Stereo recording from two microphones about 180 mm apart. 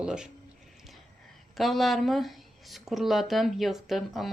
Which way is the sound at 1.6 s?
Centre (ahead or behind).